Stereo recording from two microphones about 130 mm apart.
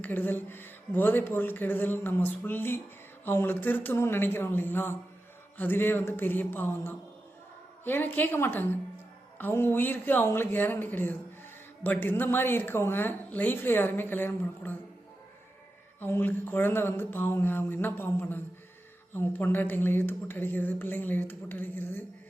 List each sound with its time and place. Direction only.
0.0 s a woman's voice: 15° left (ahead or behind)
16.0 s a woman's voice: 15° left (ahead or behind)